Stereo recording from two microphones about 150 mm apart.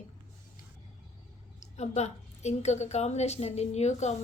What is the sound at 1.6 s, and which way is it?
A woman's voice, 45° left (ahead or behind).